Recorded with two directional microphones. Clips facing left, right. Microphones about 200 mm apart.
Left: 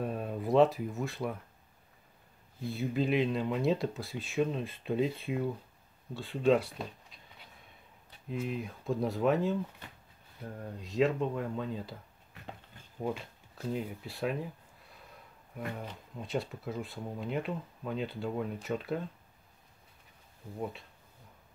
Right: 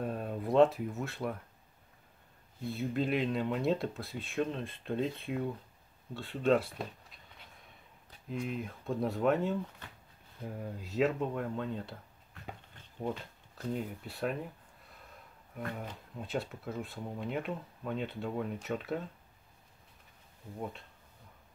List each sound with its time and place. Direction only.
0.0 s speech: centre (ahead or behind)
2.6 s speech: centre (ahead or behind)
8.3 s speech: centre (ahead or behind)
13.0 s speech: 5° left (ahead or behind)